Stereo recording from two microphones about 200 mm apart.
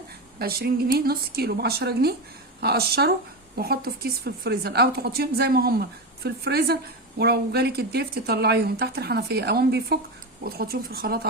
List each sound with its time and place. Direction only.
0.3 s a woman's voice: 50° right (ahead or behind)